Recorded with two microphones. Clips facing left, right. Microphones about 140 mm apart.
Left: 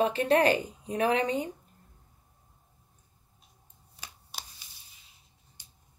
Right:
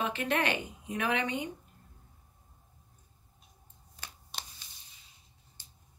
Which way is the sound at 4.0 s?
10° left (ahead or behind).